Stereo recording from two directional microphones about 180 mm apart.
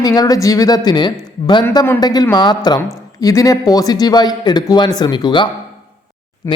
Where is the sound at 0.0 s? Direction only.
20° left (ahead or behind).